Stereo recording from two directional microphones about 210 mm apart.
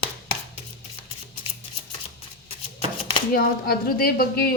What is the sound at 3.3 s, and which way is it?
A woman's voice, 45° left (ahead or behind).